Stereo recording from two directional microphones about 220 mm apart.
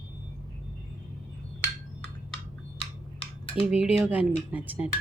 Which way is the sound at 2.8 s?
25° left (ahead or behind).